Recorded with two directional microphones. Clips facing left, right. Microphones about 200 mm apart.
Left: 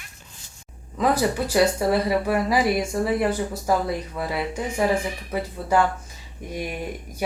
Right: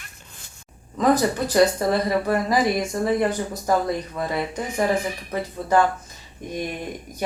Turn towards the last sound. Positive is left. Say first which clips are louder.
# even
turn(degrees=10)  # may be behind; listen again after turning